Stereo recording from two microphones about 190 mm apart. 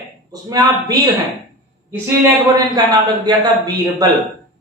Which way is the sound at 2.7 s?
20° right (ahead or behind).